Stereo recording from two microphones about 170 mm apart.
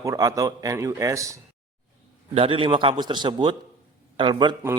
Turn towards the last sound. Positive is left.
turn(degrees=-25)  # may be behind; listen again after turning